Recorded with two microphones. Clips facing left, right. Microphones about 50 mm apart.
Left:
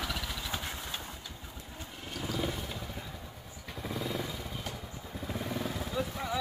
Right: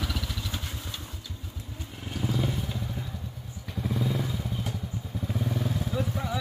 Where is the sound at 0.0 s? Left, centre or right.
Centre.